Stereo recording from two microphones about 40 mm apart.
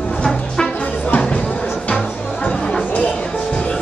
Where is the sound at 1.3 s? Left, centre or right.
Left.